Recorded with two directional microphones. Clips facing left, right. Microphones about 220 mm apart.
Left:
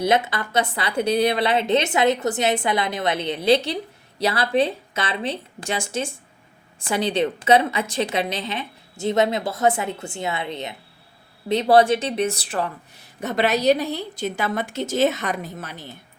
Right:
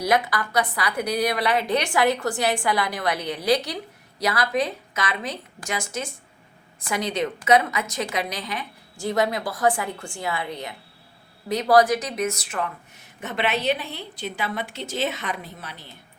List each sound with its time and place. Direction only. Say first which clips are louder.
0.0 s a woman's voice: left 2 dB; 25° left (ahead or behind); by 15.9 s 45° left (ahead or behind)